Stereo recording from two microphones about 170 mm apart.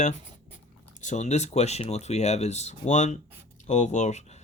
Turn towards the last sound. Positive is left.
turn(degrees=40)  # may be behind; listen again after turning